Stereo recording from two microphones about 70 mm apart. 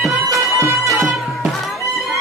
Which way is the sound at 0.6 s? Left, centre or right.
Right.